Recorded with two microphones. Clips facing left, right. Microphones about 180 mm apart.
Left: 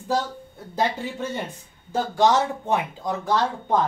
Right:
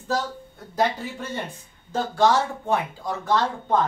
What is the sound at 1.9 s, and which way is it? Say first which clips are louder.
Speech: left 1 dB; 20° left (ahead or behind).